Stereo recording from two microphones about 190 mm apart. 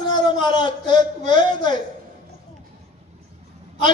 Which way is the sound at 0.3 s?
25° left (ahead or behind).